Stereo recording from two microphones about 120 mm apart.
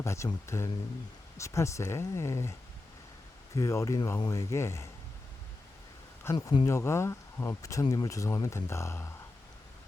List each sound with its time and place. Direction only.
0.0 s speech: 25° left (ahead or behind)
6.3 s speech: 20° left (ahead or behind)